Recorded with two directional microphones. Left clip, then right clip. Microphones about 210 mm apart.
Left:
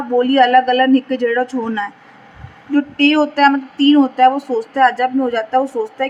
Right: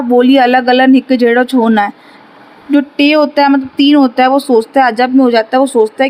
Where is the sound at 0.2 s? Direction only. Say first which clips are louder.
Right 2 dB; 40° right (ahead or behind).